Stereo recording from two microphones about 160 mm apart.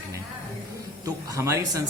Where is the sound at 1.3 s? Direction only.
20° right (ahead or behind).